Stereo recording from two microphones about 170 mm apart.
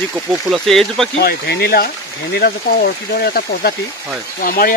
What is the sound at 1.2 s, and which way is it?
Speech, 65° left (ahead or behind).